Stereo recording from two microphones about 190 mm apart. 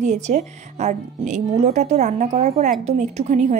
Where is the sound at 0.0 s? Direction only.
35° right (ahead or behind).